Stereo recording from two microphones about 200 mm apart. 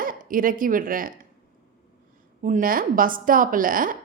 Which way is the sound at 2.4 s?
45° right (ahead or behind).